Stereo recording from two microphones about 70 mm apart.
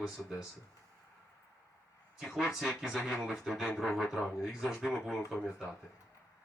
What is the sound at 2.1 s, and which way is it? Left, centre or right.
Speech, centre.